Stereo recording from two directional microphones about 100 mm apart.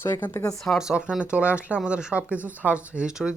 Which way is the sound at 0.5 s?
Centre (ahead or behind).